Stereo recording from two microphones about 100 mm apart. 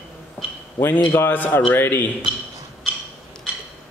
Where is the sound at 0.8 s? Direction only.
20° left (ahead or behind).